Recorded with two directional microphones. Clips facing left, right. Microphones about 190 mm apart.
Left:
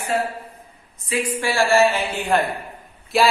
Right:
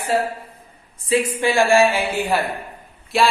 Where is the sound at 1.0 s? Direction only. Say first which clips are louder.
Right 4 dB; 25° right (ahead or behind); by 2.3 s 10° right (ahead or behind).